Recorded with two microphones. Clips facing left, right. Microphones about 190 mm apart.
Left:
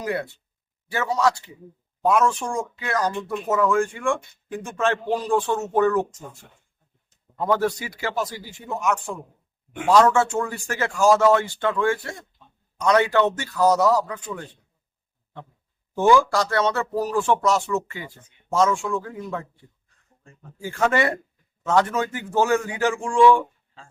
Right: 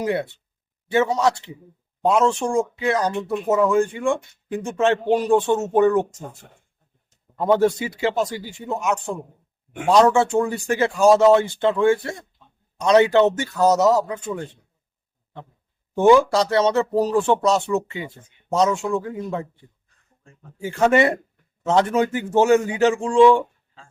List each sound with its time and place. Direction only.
0.0 s speech: 25° right (ahead or behind)
7.4 s speech: 25° right (ahead or behind)
16.0 s speech: 20° right (ahead or behind)
20.6 s speech: 20° right (ahead or behind)